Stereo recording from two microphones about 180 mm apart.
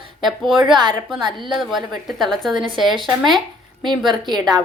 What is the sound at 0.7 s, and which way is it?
Speech, 25° right (ahead or behind).